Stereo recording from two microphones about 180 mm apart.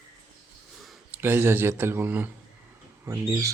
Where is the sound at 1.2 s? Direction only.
15° right (ahead or behind).